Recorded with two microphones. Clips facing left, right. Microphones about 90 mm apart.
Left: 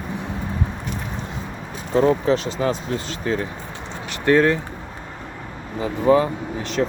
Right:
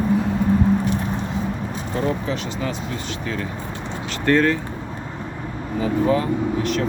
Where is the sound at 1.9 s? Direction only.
35° left (ahead or behind).